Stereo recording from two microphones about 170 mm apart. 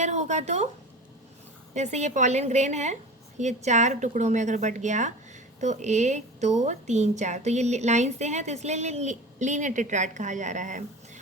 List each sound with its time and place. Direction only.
0.0 s a woman's voice: 45° right (ahead or behind)
1.7 s a woman's voice: 45° right (ahead or behind)